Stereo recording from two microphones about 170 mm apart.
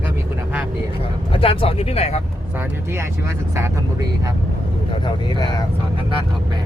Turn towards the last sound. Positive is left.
turn(degrees=25)  # may be behind; listen again after turning